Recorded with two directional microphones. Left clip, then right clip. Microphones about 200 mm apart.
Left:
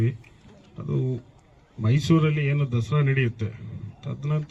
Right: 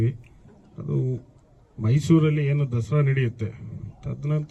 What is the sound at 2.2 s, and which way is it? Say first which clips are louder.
A man's voice: right 1 dB; 50° right (ahead or behind).